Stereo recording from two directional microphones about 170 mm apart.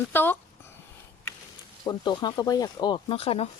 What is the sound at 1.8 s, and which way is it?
Speech, 25° left (ahead or behind).